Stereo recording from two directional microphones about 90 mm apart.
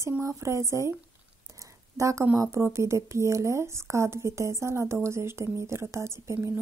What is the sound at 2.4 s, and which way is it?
Speech, 30° right (ahead or behind).